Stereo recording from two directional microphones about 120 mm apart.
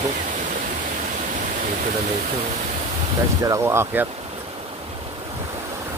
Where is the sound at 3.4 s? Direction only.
20° right (ahead or behind).